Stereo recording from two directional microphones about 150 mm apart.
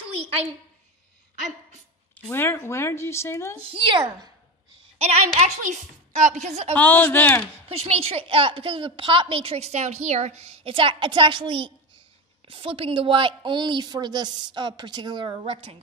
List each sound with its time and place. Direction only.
0.0 s a sound: 40° right (ahead or behind)
2.1 s speech: 15° left (ahead or behind)
3.5 s a woman's voice: 35° right (ahead or behind)
4.9 s a woman's voice: 45° right (ahead or behind)
6.7 s speech: 10° left (ahead or behind)
7.6 s a woman's voice: 40° right (ahead or behind)